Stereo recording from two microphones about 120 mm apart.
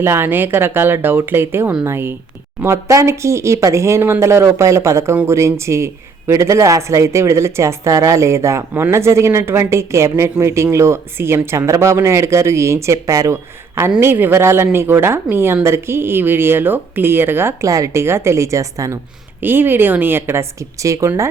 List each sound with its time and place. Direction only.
0.0 s a woman's voice: 20° right (ahead or behind)